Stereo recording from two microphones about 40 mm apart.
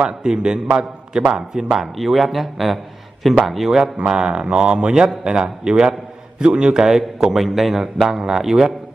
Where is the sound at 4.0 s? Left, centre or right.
Right.